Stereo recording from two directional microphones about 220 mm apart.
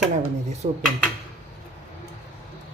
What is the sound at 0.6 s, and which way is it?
Speech, 35° right (ahead or behind).